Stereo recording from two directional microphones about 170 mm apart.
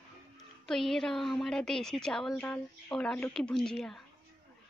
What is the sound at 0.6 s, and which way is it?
Speech, 5° left (ahead or behind).